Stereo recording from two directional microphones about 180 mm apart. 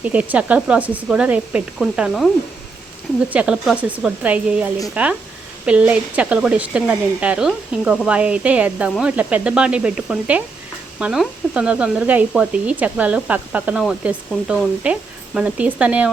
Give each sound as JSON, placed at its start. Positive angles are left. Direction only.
{"t": 0.0, "sound": "speech", "side_deg": -10}